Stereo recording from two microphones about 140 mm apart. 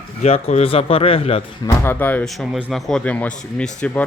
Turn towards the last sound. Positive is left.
turn(degrees=10)  # may be behind; listen again after turning